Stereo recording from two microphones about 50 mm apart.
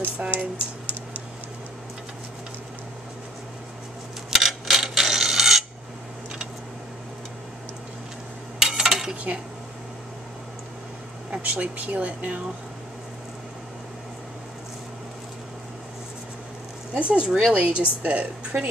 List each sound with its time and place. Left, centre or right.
0.3 s speech: right
4.3 s a sound: centre
8.5 s cutlery: centre
9.1 s speech: right
11.2 s speech: right
16.9 s speech: right